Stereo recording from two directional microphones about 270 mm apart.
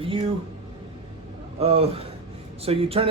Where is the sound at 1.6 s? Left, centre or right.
Right.